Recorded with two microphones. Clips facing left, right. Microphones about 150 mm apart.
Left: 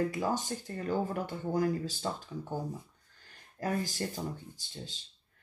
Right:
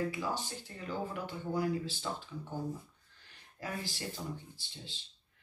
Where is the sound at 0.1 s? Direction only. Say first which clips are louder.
Left 5 dB; 45° left (ahead or behind).